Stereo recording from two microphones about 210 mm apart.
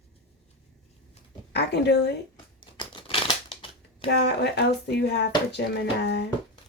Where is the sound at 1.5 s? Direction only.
55° left (ahead or behind).